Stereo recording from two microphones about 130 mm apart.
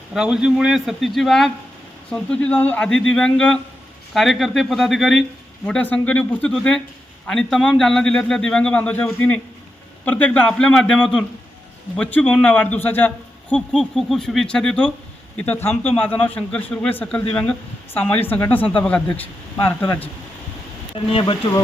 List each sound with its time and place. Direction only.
0.1 s a man's voice: 5° right (ahead or behind)
5.6 s a man's voice: 10° left (ahead or behind)
20.9 s speech: 45° left (ahead or behind)